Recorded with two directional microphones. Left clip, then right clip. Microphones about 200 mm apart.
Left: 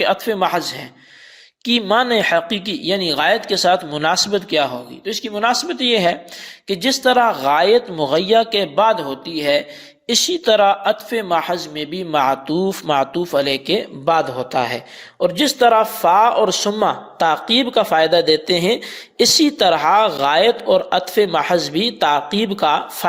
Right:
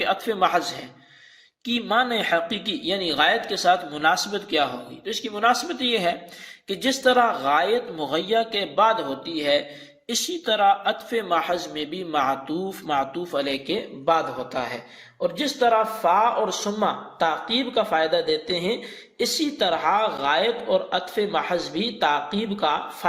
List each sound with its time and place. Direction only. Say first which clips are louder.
0.0 s speech: left 5 dB; 45° left (ahead or behind)